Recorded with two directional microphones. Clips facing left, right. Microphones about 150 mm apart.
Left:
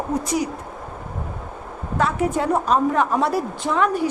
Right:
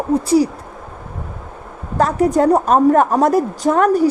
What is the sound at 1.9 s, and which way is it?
A woman's voice, 40° right (ahead or behind).